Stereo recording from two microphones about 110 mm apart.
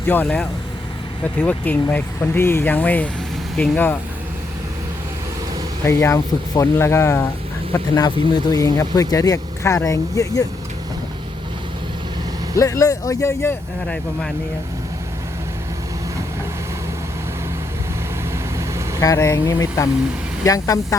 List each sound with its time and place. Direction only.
1.4 s speech: 15° left (ahead or behind)
5.8 s speech: 25° left (ahead or behind)
7.7 s speech: 35° left (ahead or behind)
12.5 s speech: 30° left (ahead or behind)
13.8 s speech: 10° left (ahead or behind)
18.9 s speech: 30° left (ahead or behind)